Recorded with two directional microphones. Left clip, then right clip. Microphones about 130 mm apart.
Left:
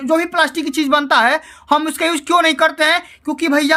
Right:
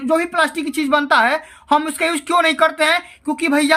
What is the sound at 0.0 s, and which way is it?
A woman's voice, 30° left (ahead or behind).